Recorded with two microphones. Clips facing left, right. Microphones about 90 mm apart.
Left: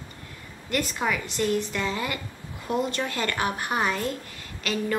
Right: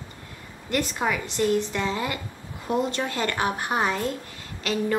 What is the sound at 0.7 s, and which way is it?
A woman's voice, 20° right (ahead or behind).